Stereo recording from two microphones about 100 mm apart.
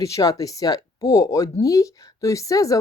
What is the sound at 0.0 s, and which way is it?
Speech, 35° left (ahead or behind).